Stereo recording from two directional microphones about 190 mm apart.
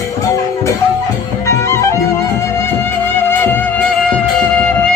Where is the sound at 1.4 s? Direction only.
15° left (ahead or behind).